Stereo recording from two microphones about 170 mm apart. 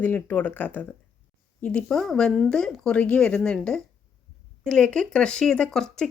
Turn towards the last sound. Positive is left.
turn(degrees=5)  # may be behind; listen again after turning